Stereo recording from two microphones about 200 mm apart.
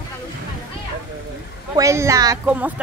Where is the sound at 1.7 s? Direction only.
15° right (ahead or behind).